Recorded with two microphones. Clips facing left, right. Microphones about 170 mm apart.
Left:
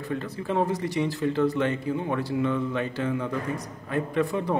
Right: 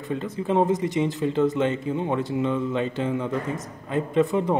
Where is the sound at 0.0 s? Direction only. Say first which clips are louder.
Right 3 dB; 20° right (ahead or behind).